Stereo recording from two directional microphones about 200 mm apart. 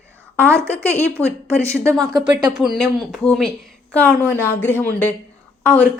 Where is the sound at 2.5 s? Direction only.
5° right (ahead or behind).